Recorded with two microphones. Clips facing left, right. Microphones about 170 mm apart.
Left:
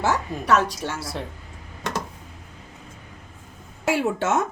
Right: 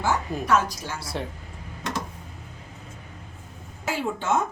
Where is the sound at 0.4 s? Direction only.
70° left (ahead or behind).